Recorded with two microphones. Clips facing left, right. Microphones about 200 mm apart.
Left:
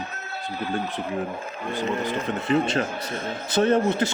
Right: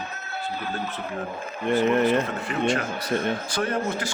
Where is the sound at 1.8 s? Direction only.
15° left (ahead or behind).